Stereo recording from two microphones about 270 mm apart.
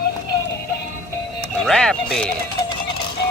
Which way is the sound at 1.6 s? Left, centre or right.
Centre.